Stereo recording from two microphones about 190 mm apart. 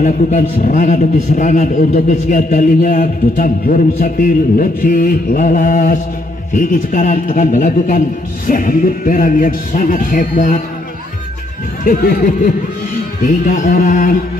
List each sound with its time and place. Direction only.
0.0 s a man's voice: 40° left (ahead or behind)
11.8 s a man's voice: 50° left (ahead or behind)